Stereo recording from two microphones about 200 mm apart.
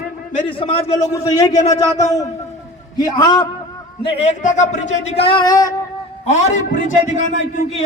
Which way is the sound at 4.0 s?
30° left (ahead or behind).